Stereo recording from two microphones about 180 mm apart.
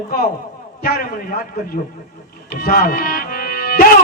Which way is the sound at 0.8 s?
55° left (ahead or behind).